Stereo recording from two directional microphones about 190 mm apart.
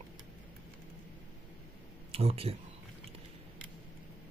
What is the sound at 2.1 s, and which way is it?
Speech, 30° right (ahead or behind).